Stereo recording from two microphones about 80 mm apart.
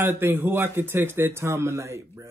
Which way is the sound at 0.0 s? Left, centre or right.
Right.